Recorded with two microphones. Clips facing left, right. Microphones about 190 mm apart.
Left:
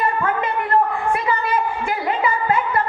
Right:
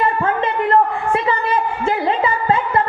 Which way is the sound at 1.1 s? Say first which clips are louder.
Right 5 dB; 25° right (ahead or behind).